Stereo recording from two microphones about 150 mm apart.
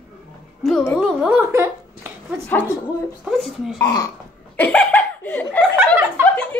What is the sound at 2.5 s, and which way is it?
Speech, 10° left (ahead or behind).